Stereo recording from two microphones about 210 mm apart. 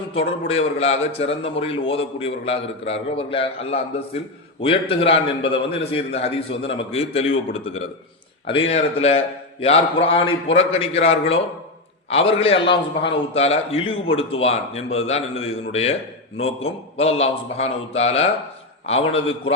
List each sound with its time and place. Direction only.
0.1 s a man's voice: 25° left (ahead or behind)